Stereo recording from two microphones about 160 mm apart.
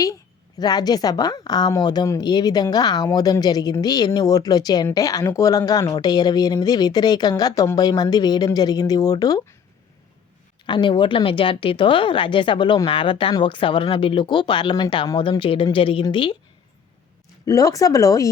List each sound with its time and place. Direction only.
0.6 s speech: 25° left (ahead or behind)
10.7 s a woman's voice: 30° left (ahead or behind)
17.4 s speech: 20° left (ahead or behind)